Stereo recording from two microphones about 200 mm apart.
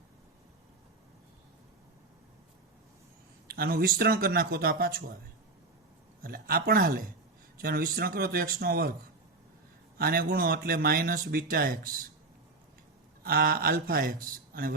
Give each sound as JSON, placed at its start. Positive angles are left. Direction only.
{"t": 3.4, "sound": "speech", "side_deg": -50}
{"t": 6.2, "sound": "speech", "side_deg": -50}
{"t": 10.0, "sound": "speech", "side_deg": -45}
{"t": 13.2, "sound": "speech", "side_deg": -50}